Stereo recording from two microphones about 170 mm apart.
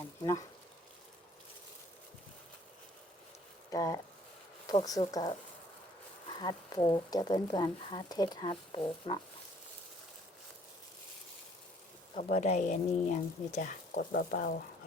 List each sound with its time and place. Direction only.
3.7 s speech: 20° left (ahead or behind)
6.4 s speech: 25° left (ahead or behind)
12.1 s speech: 40° left (ahead or behind); by 14.5 s 60° left (ahead or behind)